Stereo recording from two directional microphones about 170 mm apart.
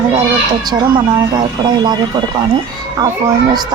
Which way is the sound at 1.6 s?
25° right (ahead or behind).